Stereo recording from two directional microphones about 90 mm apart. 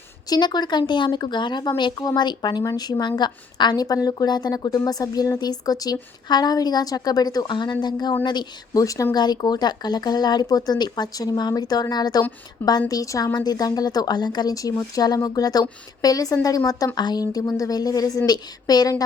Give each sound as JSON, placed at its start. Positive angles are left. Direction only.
{"t": 0.3, "sound": "a woman's voice", "side_deg": 55}
{"t": 8.8, "sound": "speech", "side_deg": 40}
{"t": 9.1, "sound": "a woman's voice", "side_deg": 50}